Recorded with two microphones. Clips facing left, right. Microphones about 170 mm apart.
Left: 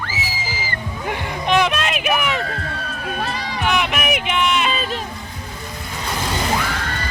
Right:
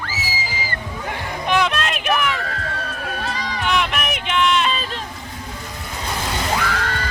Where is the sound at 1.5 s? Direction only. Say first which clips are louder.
Left 2 dB; 20° left (ahead or behind).